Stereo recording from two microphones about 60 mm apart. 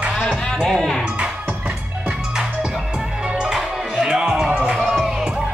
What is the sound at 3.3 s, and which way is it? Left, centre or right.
Music, centre.